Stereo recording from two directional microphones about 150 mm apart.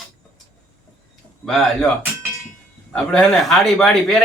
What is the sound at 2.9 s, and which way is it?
A man's voice, 5° left (ahead or behind).